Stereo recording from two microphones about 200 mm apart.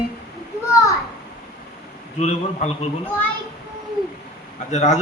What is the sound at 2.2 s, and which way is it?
Speech, 35° left (ahead or behind).